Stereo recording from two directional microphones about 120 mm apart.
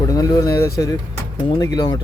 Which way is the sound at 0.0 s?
30° left (ahead or behind).